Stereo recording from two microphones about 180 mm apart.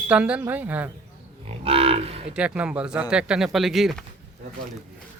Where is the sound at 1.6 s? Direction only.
30° right (ahead or behind).